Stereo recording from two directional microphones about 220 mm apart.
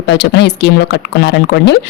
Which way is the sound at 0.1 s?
50° left (ahead or behind).